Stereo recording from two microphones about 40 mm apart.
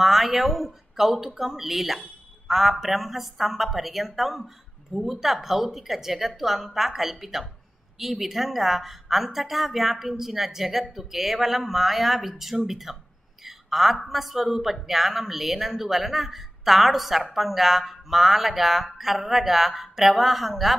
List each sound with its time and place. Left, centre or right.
0.0 s a woman's voice: centre